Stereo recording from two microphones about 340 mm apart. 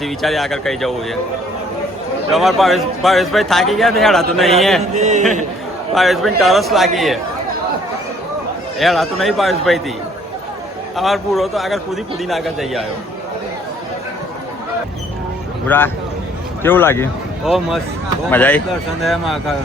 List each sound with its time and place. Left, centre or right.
0.0 s a man's voice: centre
2.3 s a man's voice: centre
4.8 s speech: right
5.9 s a man's voice: centre
8.8 s a man's voice: centre
10.9 s a man's voice: centre
15.6 s a man's voice: centre